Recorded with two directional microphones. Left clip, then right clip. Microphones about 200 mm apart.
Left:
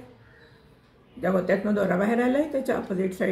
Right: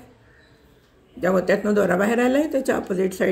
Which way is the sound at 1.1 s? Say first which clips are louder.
Right 4 dB; 50° right (ahead or behind).